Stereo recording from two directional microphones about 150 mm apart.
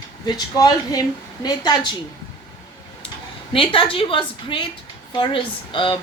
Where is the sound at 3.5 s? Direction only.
35° left (ahead or behind).